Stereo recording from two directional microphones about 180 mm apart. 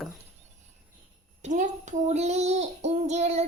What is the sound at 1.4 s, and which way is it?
Child singing, 40° right (ahead or behind).